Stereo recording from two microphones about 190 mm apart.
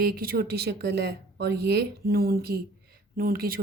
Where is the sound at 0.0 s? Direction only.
50° right (ahead or behind).